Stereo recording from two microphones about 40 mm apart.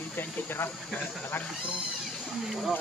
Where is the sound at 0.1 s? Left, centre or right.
Left.